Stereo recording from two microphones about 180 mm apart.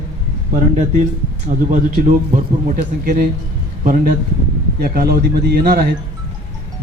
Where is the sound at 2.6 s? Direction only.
50° right (ahead or behind).